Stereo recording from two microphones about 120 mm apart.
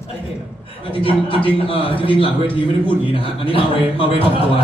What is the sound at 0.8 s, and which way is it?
A man's voice, 50° left (ahead or behind).